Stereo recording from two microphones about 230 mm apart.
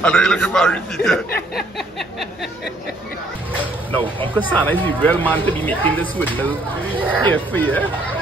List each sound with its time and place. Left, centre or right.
0.0 s a man's voice: centre
1.3 s a sound: left
1.8 s a man's voice: centre
4.6 s speech: centre